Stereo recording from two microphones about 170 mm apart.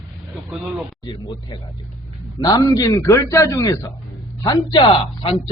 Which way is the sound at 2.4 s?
20° left (ahead or behind).